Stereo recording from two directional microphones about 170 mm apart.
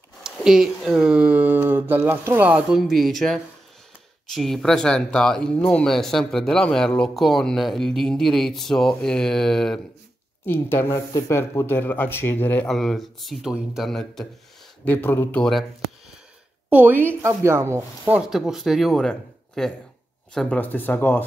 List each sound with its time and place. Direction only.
0.2 s speech: 5° right (ahead or behind)
10.4 s speech: 15° left (ahead or behind)
16.6 s a woman's voice: 10° right (ahead or behind)
18.3 s speech: centre (ahead or behind)